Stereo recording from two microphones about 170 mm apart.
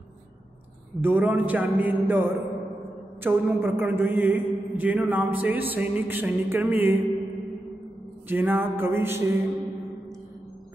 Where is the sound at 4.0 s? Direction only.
10° right (ahead or behind).